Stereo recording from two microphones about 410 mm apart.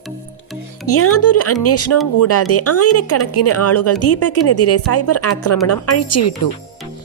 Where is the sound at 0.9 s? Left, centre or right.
Left.